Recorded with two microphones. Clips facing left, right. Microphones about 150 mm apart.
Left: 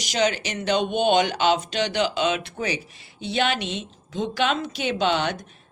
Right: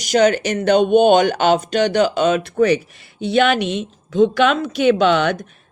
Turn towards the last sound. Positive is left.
turn(degrees=-60)  # may be behind; listen again after turning